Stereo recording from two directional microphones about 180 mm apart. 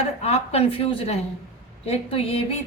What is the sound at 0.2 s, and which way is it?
A woman's voice, 35° left (ahead or behind).